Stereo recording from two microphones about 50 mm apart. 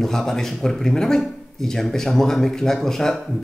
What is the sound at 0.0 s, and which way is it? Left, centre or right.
Speech, centre.